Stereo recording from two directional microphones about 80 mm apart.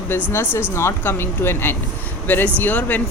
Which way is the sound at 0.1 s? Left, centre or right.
Left.